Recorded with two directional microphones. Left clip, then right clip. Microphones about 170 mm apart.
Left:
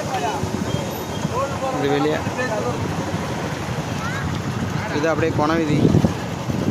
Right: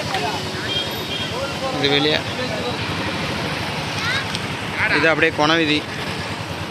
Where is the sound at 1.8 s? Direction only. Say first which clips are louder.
Right 3 dB; 20° left (ahead or behind).